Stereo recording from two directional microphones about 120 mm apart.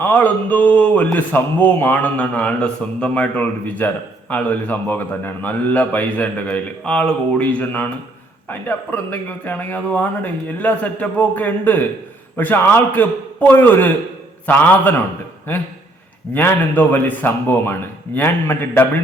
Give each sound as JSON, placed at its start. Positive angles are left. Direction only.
{"t": 0.0, "sound": "speech", "side_deg": 15}
{"t": 16.3, "sound": "speech", "side_deg": 15}